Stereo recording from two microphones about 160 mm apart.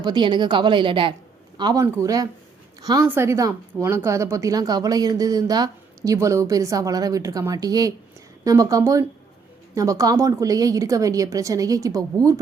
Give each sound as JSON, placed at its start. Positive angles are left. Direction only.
{"t": 0.0, "sound": "speech", "side_deg": -30}